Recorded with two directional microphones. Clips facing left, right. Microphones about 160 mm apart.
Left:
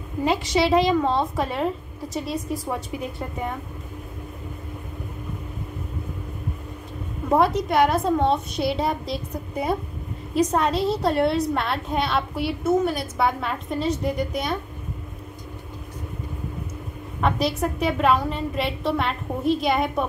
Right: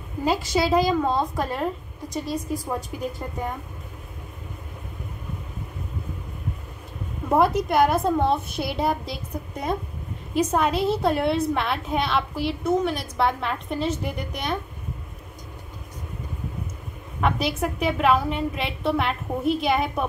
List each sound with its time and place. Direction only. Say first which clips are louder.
0.2 s a woman's voice: left 1 dB; centre (ahead or behind)
7.2 s a woman's voice: even; centre (ahead or behind)
17.2 s a woman's voice: left 1 dB; centre (ahead or behind)